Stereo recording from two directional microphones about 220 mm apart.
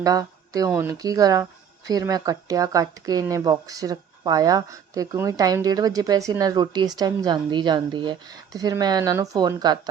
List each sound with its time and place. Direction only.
0.0 s speech: 15° right (ahead or behind)